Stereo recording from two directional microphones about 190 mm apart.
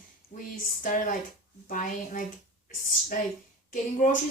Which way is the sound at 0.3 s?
45° left (ahead or behind).